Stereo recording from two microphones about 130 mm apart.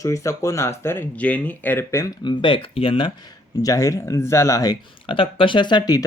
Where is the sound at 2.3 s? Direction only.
40° left (ahead or behind).